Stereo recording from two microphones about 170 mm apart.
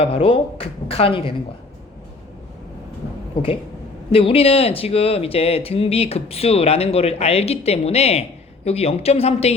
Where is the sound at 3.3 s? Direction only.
30° left (ahead or behind).